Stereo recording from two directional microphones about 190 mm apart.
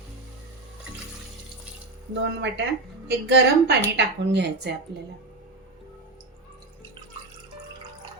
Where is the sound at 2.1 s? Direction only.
65° right (ahead or behind).